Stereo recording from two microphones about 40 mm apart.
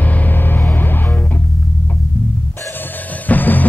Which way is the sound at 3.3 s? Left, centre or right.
Left.